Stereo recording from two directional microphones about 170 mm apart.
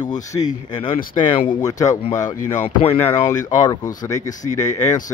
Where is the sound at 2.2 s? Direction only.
45° left (ahead or behind).